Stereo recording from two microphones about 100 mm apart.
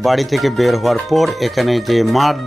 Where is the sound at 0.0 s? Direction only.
Centre (ahead or behind).